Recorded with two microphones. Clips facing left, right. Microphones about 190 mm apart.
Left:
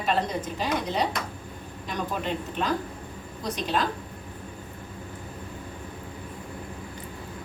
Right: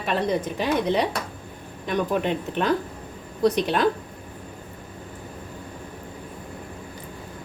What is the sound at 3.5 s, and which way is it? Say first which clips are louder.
Speech: right 4 dB; 65° right (ahead or behind).